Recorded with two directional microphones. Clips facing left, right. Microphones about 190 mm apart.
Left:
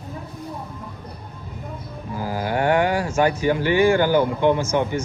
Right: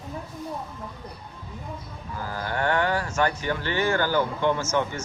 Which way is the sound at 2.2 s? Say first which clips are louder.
Left 6 dB; 10° left (ahead or behind).